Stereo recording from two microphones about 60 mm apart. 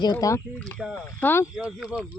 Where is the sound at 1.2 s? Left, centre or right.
Left.